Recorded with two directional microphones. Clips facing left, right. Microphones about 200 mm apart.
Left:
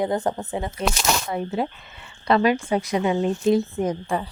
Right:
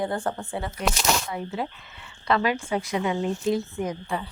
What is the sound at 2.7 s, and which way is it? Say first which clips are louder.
A woman's voice: left 4 dB; 40° left (ahead or behind).